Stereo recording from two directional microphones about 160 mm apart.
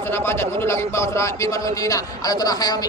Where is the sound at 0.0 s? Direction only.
15° left (ahead or behind).